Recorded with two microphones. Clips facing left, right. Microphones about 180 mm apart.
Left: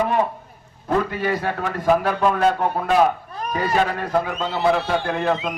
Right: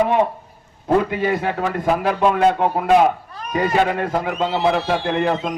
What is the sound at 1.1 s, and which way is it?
A man's voice, 20° right (ahead or behind).